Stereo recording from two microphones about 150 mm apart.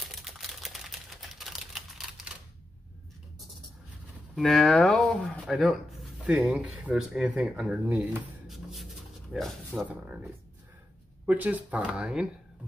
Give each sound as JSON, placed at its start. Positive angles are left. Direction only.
{"t": 0.0, "sound": "typewriter", "side_deg": 0}
{"t": 4.4, "sound": "speech", "side_deg": 0}
{"t": 9.3, "sound": "speech", "side_deg": 0}
{"t": 9.8, "sound": "speech", "side_deg": -10}